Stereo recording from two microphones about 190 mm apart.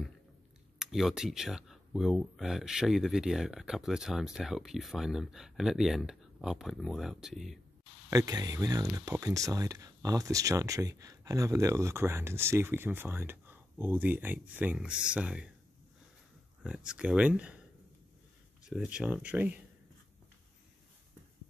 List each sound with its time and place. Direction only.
0.7 s speech: centre (ahead or behind)
8.1 s speech: 20° right (ahead or behind)
16.6 s speech: 5° right (ahead or behind)
18.6 s speech: 5° right (ahead or behind)